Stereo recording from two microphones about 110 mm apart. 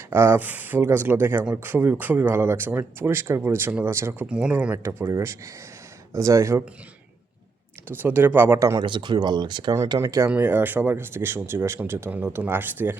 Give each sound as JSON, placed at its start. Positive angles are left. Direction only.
{"t": 0.1, "sound": "speech", "side_deg": -20}
{"t": 4.3, "sound": "speech", "side_deg": -10}
{"t": 4.8, "sound": "speech", "side_deg": -25}
{"t": 7.9, "sound": "speech", "side_deg": -20}
{"t": 8.8, "sound": "speech", "side_deg": -45}
{"t": 10.0, "sound": "speech", "side_deg": -25}